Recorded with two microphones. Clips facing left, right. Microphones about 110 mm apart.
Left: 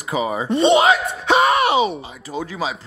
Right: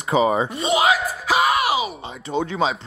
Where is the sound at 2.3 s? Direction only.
25° right (ahead or behind).